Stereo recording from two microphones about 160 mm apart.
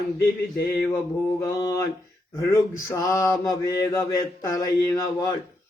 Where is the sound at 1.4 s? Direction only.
20° left (ahead or behind).